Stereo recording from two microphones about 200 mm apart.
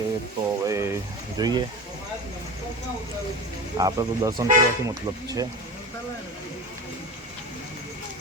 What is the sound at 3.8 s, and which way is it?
Speech, 15° right (ahead or behind).